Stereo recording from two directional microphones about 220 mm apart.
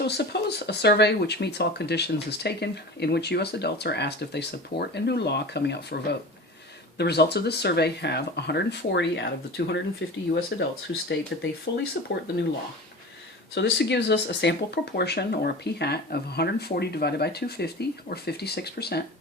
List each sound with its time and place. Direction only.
0.0 s speech: 50° left (ahead or behind)
13.5 s speech: 50° left (ahead or behind)